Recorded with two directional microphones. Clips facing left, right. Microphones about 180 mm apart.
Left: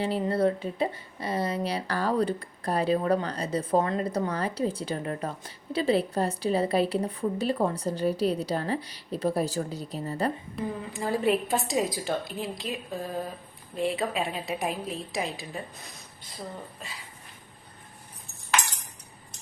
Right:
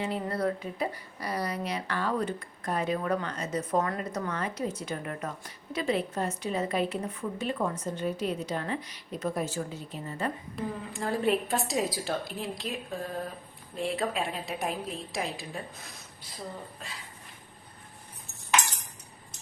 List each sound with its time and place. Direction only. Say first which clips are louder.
0.0 s a woman's voice: left 5 dB; 30° left (ahead or behind)
10.5 s a woman's voice: left 2 dB; centre (ahead or behind)
13.7 s a woman's voice: left 2 dB; centre (ahead or behind)